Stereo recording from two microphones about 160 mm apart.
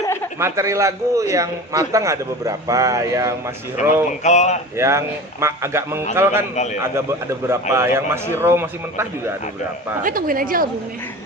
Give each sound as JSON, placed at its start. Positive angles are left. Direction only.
{"t": 0.3, "sound": "a man's voice", "side_deg": -15}
{"t": 3.8, "sound": "speech", "side_deg": 45}
{"t": 4.8, "sound": "a man's voice", "side_deg": -15}
{"t": 10.0, "sound": "speech", "side_deg": -60}